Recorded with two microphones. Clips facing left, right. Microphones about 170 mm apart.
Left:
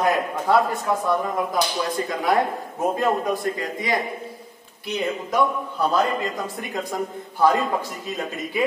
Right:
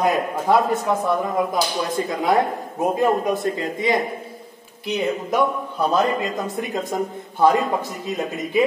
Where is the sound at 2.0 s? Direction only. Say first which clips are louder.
Right 2 dB; 20° right (ahead or behind).